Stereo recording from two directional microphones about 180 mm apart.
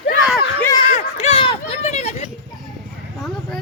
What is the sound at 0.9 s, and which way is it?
Speech, 40° left (ahead or behind).